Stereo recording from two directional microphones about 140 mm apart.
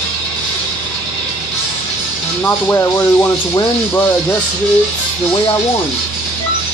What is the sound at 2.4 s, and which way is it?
Speech, 15° left (ahead or behind).